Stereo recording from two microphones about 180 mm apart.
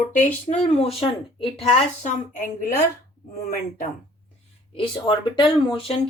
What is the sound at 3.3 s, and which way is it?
Speech, 55° left (ahead or behind).